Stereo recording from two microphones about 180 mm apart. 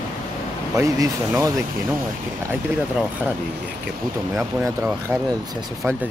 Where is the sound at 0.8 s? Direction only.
20° right (ahead or behind).